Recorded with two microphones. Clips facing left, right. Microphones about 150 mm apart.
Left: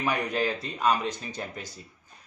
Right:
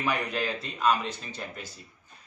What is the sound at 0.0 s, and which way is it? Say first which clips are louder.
Speech: left 2 dB; 15° left (ahead or behind).